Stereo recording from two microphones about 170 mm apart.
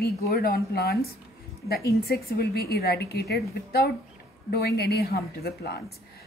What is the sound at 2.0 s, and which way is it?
A woman's voice, 65° left (ahead or behind).